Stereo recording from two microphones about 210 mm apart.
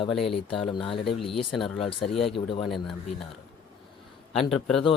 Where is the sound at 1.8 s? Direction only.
25° left (ahead or behind).